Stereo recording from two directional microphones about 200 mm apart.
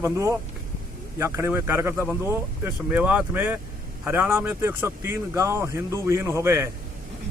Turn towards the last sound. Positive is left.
turn(degrees=-15)  # may be behind; listen again after turning